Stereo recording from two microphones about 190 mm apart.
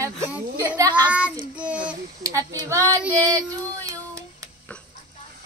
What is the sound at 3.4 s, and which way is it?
Child singing, 15° right (ahead or behind).